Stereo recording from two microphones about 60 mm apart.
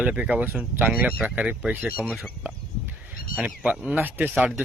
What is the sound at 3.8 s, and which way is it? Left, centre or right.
Speech, right.